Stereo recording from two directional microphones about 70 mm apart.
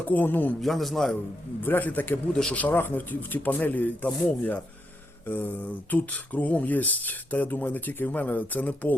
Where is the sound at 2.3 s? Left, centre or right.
Centre.